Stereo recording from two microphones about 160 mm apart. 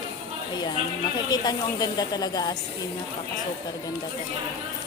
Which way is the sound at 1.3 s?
25° left (ahead or behind).